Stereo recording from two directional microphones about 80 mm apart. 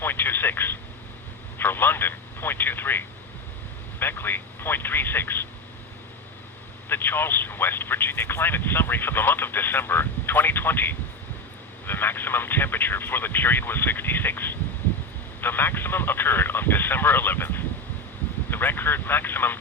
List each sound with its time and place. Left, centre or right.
0.0 s speech: left
6.8 s speech: left